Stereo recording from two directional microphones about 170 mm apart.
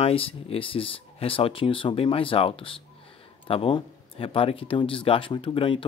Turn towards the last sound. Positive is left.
turn(degrees=30)  # may be behind; listen again after turning